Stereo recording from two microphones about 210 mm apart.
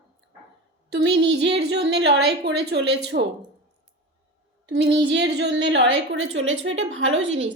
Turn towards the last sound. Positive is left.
turn(degrees=-60)  # may be behind; listen again after turning